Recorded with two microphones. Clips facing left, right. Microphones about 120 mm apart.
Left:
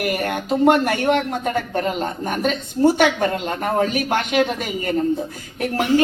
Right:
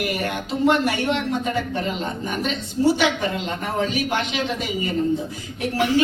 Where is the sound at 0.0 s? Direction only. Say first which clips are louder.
Left 3 dB; 50° left (ahead or behind).